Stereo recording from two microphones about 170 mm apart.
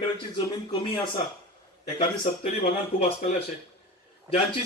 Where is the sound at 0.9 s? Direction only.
30° left (ahead or behind).